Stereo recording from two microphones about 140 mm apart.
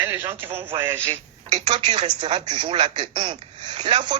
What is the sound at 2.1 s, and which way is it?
Speech, 35° right (ahead or behind).